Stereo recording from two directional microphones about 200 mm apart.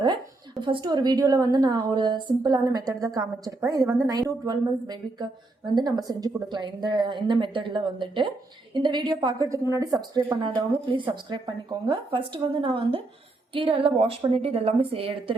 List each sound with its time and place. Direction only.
0.6 s speech: 25° right (ahead or behind)